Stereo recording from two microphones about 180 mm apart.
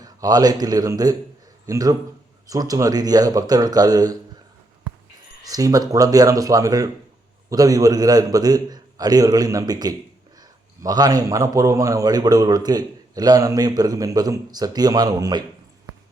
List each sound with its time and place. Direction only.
0.0 s a man's voice: 20° right (ahead or behind)
5.4 s a man's voice: 20° right (ahead or behind)